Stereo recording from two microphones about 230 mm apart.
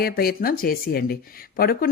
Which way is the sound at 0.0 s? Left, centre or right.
Left.